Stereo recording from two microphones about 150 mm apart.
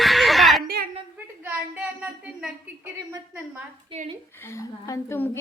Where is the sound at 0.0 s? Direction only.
Centre (ahead or behind).